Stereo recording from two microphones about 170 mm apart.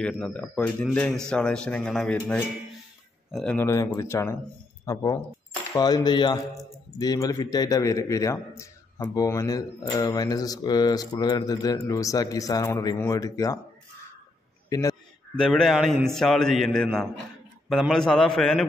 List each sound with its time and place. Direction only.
0.0 s a man's voice: 5° left (ahead or behind)
3.3 s speech: centre (ahead or behind)
3.5 s a man's voice: 15° left (ahead or behind)
14.7 s a sound: 20° left (ahead or behind)
15.3 s a man's voice: 5° left (ahead or behind)